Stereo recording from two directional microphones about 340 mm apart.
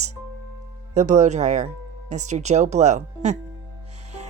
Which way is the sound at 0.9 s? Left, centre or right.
Centre.